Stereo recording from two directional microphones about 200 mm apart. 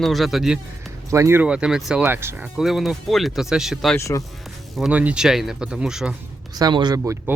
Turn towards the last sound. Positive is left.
turn(degrees=-15)  # may be behind; listen again after turning